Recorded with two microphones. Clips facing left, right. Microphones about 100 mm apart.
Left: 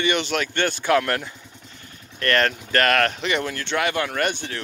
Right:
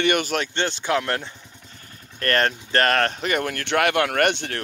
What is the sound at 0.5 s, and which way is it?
Speech, 20° right (ahead or behind).